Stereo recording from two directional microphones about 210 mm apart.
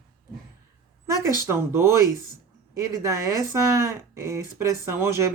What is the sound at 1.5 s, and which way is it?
Speech, 10° right (ahead or behind).